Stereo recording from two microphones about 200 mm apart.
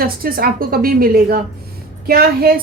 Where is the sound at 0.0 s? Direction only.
50° right (ahead or behind).